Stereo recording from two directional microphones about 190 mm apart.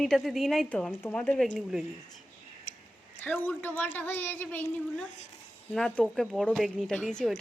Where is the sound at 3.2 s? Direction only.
10° left (ahead or behind).